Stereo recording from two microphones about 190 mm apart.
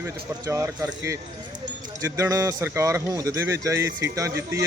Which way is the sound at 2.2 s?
15° right (ahead or behind).